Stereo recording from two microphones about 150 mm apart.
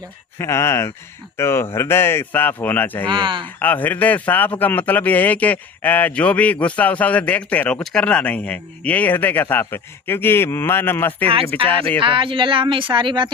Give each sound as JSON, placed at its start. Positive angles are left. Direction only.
{"t": 0.3, "sound": "a man's voice", "side_deg": 20}
{"t": 3.1, "sound": "speech", "side_deg": -30}
{"t": 3.4, "sound": "a man's voice", "side_deg": 10}
{"t": 11.9, "sound": "speech", "side_deg": -35}